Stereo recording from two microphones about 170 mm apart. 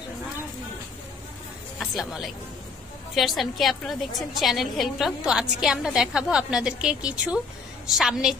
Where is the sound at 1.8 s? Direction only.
Centre (ahead or behind).